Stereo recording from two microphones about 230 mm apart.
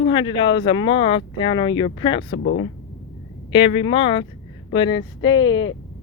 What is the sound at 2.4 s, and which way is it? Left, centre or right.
Speech, left.